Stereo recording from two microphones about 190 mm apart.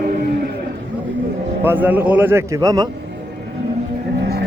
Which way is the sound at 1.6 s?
10° right (ahead or behind).